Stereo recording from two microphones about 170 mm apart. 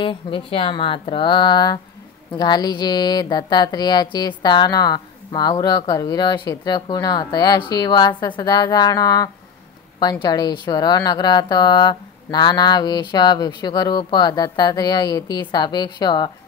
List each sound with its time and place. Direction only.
0.0 s speech: 30° left (ahead or behind)